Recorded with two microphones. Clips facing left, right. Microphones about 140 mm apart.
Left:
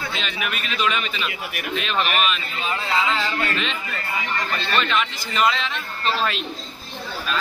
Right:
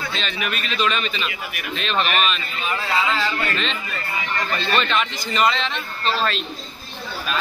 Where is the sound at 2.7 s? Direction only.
20° left (ahead or behind).